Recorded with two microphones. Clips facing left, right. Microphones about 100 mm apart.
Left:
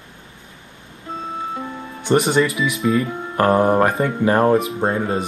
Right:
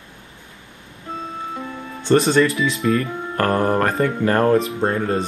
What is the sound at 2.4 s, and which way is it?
Speech, 30° right (ahead or behind).